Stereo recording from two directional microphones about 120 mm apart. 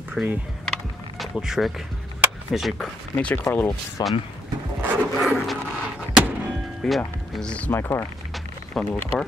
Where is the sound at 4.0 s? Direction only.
35° left (ahead or behind).